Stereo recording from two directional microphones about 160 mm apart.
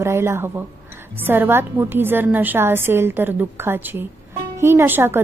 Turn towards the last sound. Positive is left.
turn(degrees=-15)  # may be behind; listen again after turning